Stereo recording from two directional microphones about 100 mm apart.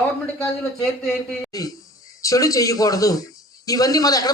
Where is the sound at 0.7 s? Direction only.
Centre (ahead or behind).